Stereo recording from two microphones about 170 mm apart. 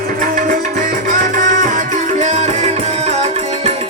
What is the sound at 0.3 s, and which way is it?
Music, 50° right (ahead or behind).